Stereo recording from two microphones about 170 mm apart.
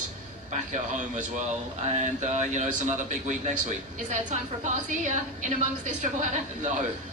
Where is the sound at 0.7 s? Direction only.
50° right (ahead or behind).